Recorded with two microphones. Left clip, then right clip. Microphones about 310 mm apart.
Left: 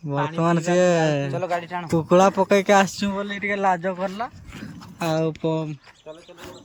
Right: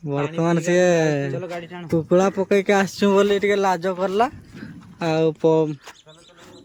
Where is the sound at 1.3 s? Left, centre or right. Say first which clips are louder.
Left 5 dB; centre.